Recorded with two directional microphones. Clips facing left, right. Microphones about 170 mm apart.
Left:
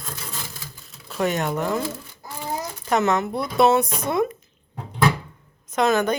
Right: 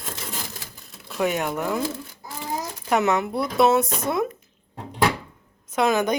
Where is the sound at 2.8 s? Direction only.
10° right (ahead or behind).